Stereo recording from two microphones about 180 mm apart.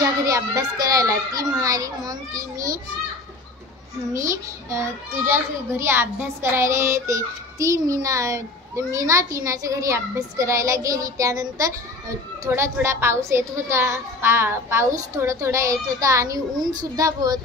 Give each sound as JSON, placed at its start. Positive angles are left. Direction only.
{"t": 0.0, "sound": "a child's voice", "side_deg": -20}
{"t": 4.6, "sound": "a child's voice", "side_deg": -15}